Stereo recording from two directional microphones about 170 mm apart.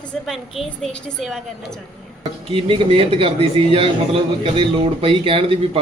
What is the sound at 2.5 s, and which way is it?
A man's voice, 30° right (ahead or behind).